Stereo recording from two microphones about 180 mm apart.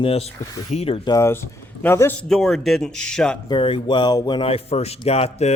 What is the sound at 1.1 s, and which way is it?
A man's voice, 15° left (ahead or behind).